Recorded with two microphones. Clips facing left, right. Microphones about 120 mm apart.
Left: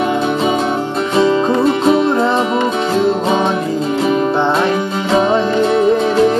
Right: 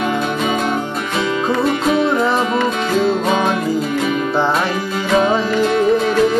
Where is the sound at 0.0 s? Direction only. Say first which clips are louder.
Left 4 dB; 30° left (ahead or behind).